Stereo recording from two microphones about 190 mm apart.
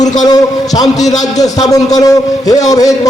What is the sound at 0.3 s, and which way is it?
A man's voice, 20° left (ahead or behind).